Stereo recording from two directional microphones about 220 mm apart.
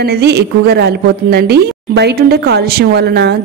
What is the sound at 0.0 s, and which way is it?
A woman's voice, 45° right (ahead or behind).